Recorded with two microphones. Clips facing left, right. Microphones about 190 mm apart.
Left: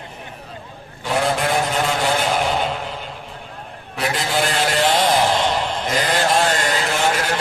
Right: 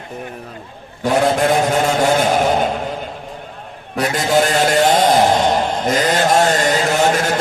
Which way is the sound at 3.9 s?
45° right (ahead or behind).